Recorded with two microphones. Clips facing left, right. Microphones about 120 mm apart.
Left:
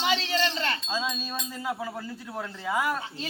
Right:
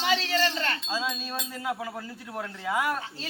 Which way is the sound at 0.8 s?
5° right (ahead or behind).